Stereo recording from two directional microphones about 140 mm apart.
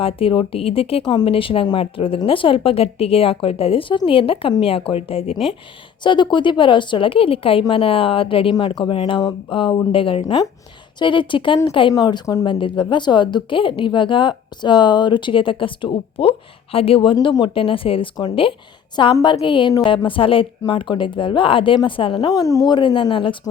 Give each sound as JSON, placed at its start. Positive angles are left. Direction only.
{"t": 0.0, "sound": "a woman's voice", "side_deg": 40}
{"t": 6.0, "sound": "a woman's voice", "side_deg": 35}
{"t": 12.5, "sound": "a woman's voice", "side_deg": 35}